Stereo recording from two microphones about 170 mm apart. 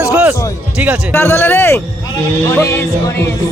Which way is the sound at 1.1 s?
15° left (ahead or behind).